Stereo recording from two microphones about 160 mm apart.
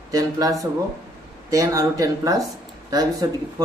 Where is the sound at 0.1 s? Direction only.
20° right (ahead or behind).